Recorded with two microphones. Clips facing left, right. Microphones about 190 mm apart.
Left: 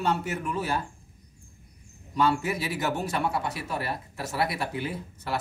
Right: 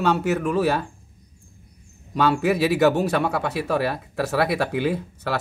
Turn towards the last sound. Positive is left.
turn(degrees=-75)  # may be behind; listen again after turning